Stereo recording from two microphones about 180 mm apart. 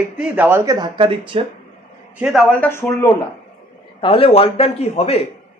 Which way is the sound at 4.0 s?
30° left (ahead or behind).